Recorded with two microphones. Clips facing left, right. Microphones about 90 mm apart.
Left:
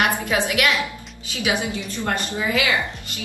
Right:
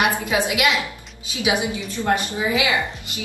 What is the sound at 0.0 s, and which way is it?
A woman's voice, 20° right (ahead or behind).